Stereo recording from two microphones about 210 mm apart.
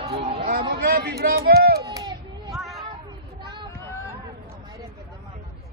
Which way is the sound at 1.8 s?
20° right (ahead or behind).